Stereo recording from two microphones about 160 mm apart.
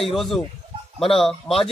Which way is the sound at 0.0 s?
Centre (ahead or behind).